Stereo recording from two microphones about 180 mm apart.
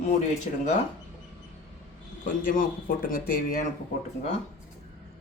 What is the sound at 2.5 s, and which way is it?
Speech, 50° left (ahead or behind).